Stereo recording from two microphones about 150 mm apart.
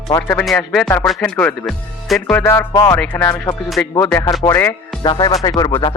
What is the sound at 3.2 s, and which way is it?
Speech, 25° left (ahead or behind).